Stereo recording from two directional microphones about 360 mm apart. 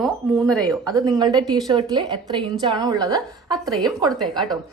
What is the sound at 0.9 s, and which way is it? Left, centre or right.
A woman's voice, centre.